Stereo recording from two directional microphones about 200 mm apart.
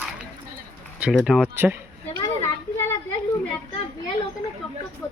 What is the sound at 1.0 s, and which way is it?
Speech, 5° right (ahead or behind).